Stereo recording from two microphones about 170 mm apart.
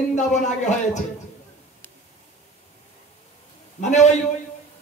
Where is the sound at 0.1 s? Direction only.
45° left (ahead or behind).